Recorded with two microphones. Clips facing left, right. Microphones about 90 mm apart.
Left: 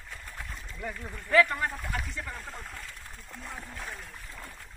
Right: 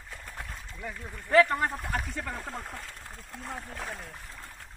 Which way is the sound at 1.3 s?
35° right (ahead or behind).